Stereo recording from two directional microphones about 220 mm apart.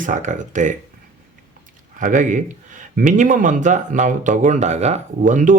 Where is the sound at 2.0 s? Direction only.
35° right (ahead or behind).